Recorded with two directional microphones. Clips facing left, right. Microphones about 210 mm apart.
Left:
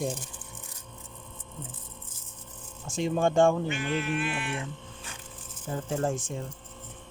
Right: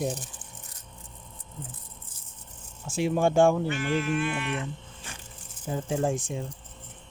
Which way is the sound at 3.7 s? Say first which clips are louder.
Right 2 dB; 20° left (ahead or behind).